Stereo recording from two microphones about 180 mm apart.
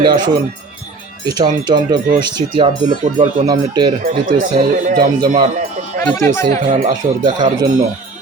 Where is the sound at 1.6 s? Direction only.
25° right (ahead or behind).